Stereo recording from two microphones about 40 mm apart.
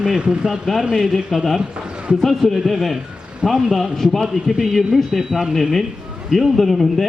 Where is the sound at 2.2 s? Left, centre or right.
Centre.